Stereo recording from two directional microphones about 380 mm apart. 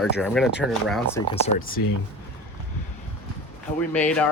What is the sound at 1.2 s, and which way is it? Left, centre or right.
Speech, centre.